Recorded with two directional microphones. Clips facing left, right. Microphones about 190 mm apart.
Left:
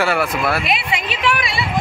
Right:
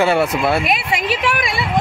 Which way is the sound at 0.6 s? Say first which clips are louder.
Right 3 dB; 45° right (ahead or behind).